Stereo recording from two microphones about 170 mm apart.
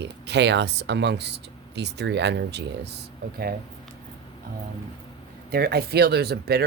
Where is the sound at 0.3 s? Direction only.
90° right; by 3.5 s 70° right (ahead or behind).